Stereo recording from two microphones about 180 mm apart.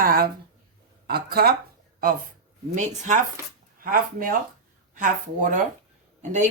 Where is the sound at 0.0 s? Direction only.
55° right (ahead or behind).